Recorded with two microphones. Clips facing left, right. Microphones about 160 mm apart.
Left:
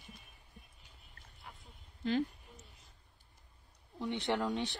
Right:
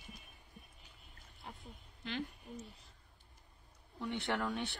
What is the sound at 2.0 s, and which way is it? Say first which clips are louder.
Speech: left 8 dB; 40° left (ahead or behind).